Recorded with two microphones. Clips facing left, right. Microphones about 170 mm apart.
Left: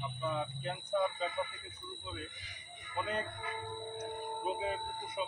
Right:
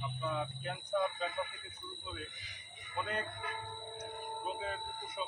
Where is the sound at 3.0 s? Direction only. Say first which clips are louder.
Left 2 dB; centre (ahead or behind).